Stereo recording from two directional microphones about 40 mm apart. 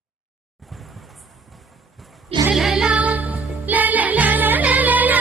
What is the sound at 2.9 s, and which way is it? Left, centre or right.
Music, right.